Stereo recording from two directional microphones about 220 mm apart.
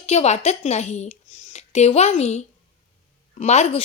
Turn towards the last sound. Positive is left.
turn(degrees=30)  # may be behind; listen again after turning